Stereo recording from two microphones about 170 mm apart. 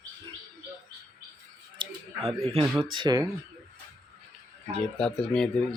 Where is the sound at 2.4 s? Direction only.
35° right (ahead or behind).